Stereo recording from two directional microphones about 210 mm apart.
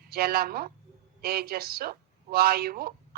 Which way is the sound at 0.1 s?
45° right (ahead or behind).